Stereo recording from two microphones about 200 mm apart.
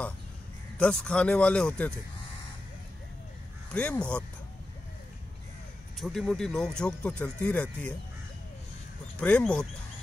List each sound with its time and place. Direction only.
0.7 s speech: 5° left (ahead or behind)
3.7 s speech: 5° left (ahead or behind)
5.9 s speech: centre (ahead or behind)
9.2 s speech: 5° left (ahead or behind)